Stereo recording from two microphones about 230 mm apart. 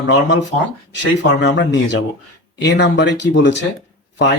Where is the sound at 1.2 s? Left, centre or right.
Left.